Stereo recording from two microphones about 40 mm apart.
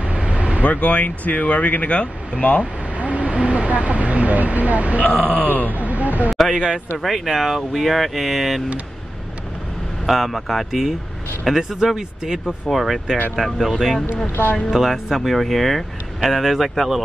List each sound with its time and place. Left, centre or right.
0.0 s vehicle: right
0.7 s speech: left
3.0 s speech: right
5.0 s speech: left
5.8 s speech: right
6.5 s speech: centre
7.0 s speech: centre
10.0 s speech: centre
12.6 s speech: centre
14.2 s speech: left
14.7 s speech: centre